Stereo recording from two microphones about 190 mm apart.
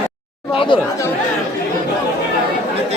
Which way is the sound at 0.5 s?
25° left (ahead or behind).